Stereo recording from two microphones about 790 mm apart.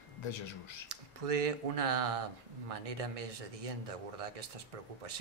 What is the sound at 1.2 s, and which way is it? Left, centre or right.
Speech, right.